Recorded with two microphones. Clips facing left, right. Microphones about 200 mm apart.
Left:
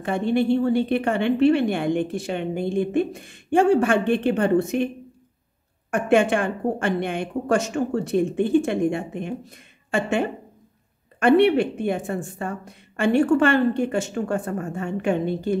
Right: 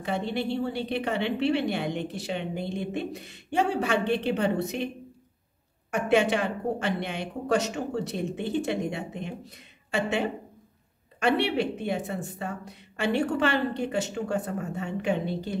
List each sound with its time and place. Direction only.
0.0 s a woman's voice: 50° left (ahead or behind)
5.9 s a woman's voice: 50° left (ahead or behind)